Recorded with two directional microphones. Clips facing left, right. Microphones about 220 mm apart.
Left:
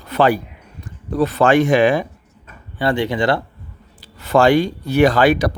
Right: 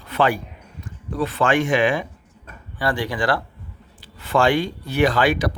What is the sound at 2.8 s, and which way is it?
Speech, 25° left (ahead or behind).